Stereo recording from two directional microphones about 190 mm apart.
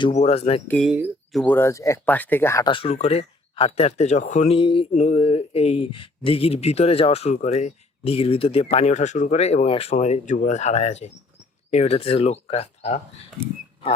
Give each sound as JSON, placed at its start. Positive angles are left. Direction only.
{"t": 0.0, "sound": "speech", "side_deg": 35}
{"t": 0.7, "sound": "speech", "side_deg": 0}
{"t": 1.4, "sound": "speech", "side_deg": 10}